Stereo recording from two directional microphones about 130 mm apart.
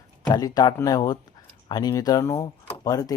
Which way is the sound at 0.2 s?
30° left (ahead or behind).